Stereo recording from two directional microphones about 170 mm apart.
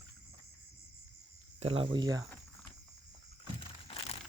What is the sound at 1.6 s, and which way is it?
Speech, 35° right (ahead or behind).